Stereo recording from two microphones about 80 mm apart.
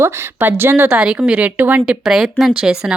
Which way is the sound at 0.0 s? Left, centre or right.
Right.